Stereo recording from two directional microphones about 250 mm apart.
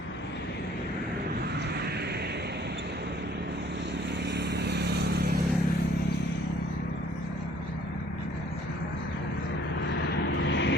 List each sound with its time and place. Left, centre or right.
4.3 s vehicle: right
10.4 s vehicle: left